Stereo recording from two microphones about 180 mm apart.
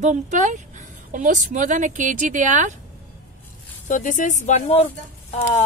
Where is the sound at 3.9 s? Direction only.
45° left (ahead or behind).